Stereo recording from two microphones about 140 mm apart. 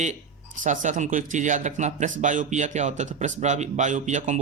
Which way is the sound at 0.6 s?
60° right (ahead or behind).